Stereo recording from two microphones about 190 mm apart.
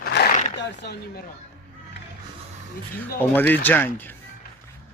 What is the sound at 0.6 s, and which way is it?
Speech, 60° left (ahead or behind).